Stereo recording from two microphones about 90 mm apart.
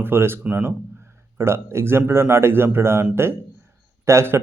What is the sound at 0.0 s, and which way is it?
Speech, 25° right (ahead or behind).